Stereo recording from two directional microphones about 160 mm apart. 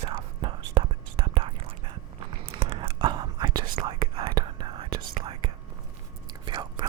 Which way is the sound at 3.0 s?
25° right (ahead or behind).